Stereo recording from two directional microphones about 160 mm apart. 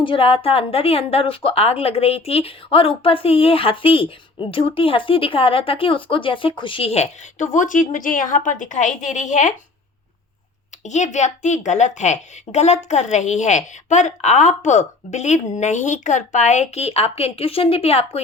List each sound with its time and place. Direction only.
0.0 s a woman's voice: 35° left (ahead or behind)
10.8 s a woman's voice: 50° left (ahead or behind)